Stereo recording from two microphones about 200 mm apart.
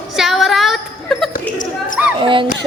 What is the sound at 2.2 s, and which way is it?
Speech, 25° right (ahead or behind).